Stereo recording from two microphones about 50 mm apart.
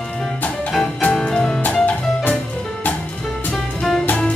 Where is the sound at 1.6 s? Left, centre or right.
Left.